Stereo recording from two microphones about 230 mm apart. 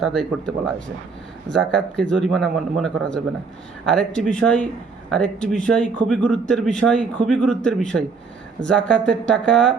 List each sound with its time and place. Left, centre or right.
0.0 s a man's voice: centre